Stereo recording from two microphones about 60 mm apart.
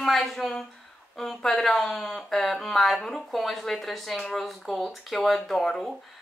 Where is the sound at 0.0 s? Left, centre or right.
Centre.